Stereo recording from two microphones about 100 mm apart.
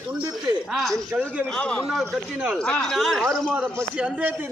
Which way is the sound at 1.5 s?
10° left (ahead or behind).